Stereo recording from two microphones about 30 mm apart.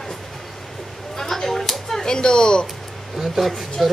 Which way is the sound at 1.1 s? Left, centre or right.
Centre.